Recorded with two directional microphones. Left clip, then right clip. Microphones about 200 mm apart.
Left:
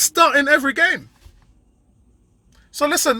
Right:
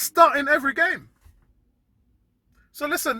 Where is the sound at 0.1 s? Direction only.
10° left (ahead or behind).